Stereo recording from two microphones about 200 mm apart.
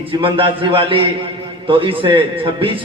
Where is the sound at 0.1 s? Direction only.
25° right (ahead or behind).